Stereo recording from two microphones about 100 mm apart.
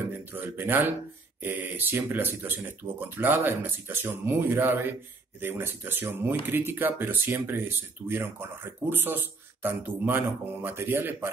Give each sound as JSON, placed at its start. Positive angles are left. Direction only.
{"t": 0.3, "sound": "speech", "side_deg": -20}